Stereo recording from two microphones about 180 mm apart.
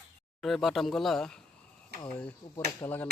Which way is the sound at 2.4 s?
20° left (ahead or behind).